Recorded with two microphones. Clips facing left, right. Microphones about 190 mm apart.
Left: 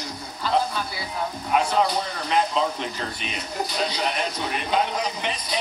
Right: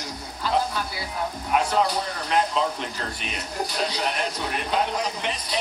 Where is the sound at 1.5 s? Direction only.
Centre (ahead or behind).